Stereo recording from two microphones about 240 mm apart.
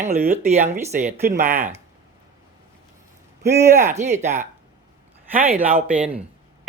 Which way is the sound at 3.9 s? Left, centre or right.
Right.